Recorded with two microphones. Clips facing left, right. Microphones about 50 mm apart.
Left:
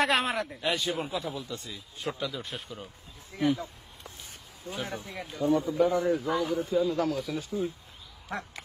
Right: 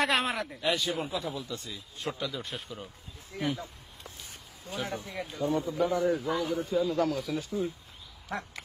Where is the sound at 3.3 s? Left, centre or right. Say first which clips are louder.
Left 5 dB; left.